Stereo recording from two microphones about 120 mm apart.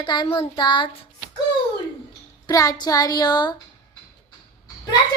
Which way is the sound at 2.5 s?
30° left (ahead or behind).